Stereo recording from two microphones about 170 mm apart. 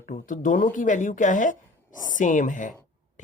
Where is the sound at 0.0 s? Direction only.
50° left (ahead or behind).